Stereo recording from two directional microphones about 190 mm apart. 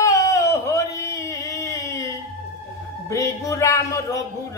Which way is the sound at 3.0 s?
15° left (ahead or behind).